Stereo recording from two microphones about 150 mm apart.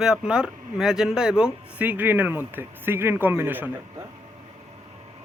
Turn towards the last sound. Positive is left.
turn(degrees=-10)  # may be behind; listen again after turning